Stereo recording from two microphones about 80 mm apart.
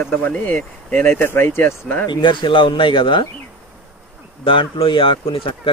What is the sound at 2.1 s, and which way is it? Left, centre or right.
Speech, left.